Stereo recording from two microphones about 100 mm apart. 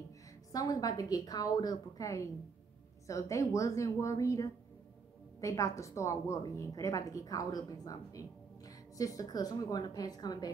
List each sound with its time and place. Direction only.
0.5 s a woman's voice: 40° left (ahead or behind)